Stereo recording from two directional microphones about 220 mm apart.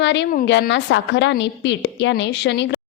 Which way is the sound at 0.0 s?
55° left (ahead or behind).